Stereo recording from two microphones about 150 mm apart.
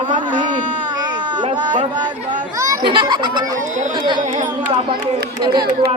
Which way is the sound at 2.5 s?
20° right (ahead or behind).